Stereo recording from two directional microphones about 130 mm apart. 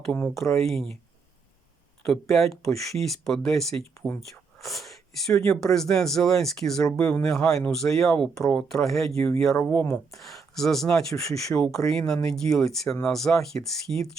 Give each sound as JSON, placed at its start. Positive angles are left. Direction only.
{"t": 0.0, "sound": "speech", "side_deg": 10}
{"t": 2.0, "sound": "speech", "side_deg": 0}
{"t": 9.8, "sound": "speech", "side_deg": 20}
{"t": 10.2, "sound": "speech", "side_deg": 0}